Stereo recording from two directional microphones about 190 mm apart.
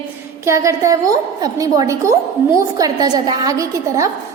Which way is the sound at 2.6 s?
20° right (ahead or behind).